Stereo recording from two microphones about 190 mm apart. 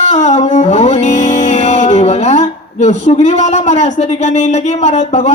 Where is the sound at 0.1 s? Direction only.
35° left (ahead or behind).